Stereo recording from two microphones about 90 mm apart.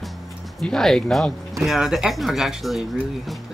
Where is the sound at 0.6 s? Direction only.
5° left (ahead or behind).